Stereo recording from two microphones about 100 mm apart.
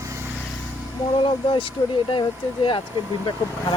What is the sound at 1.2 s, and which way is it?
Speech, 55° left (ahead or behind).